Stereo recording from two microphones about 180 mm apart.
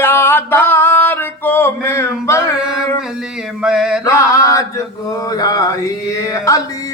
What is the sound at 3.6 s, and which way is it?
Mantra, 5° right (ahead or behind).